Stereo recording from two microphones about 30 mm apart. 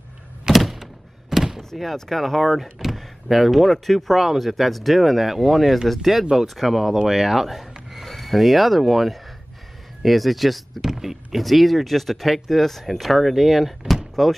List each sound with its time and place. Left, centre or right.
0.5 s door: centre
2.0 s speech: centre
10.8 s speech: centre